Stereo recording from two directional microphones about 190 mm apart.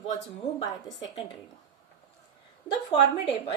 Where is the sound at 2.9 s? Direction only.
25° left (ahead or behind).